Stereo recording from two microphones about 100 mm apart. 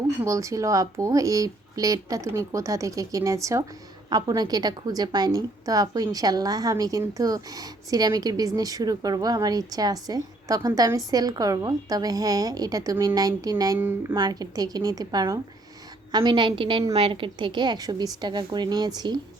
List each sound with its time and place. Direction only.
0.3 s speech: 30° right (ahead or behind)
13.7 s speech: 20° right (ahead or behind)
14.2 s speech: 40° right (ahead or behind)
16.1 s a woman's voice: 55° right (ahead or behind)